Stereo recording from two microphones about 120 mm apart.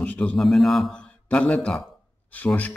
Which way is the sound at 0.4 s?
Centre (ahead or behind).